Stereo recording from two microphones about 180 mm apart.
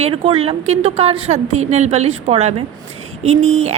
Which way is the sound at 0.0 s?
30° right (ahead or behind).